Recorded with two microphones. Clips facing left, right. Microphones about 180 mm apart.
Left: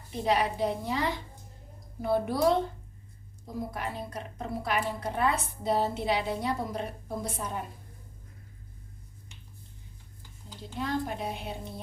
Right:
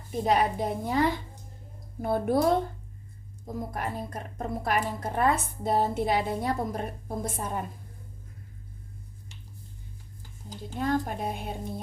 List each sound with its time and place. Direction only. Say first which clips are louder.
0.1 s a woman's voice: right 3 dB; 45° right (ahead or behind)
10.5 s a woman's voice: right 4 dB; 45° right (ahead or behind)